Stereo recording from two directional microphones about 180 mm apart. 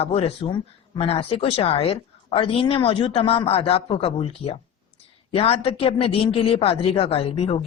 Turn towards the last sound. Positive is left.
turn(degrees=35)  # may be behind; listen again after turning